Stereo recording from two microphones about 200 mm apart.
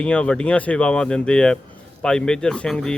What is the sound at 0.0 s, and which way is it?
Speech, 5° left (ahead or behind).